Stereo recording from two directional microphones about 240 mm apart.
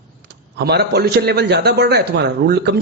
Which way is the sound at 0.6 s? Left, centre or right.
Right.